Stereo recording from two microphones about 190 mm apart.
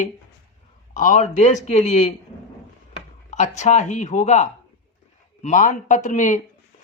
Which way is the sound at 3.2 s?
40° left (ahead or behind).